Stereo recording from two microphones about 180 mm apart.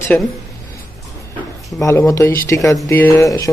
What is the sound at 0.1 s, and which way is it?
Speech, 5° left (ahead or behind).